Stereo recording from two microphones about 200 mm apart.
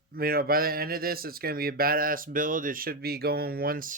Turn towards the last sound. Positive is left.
turn(degrees=-45)  # may be behind; listen again after turning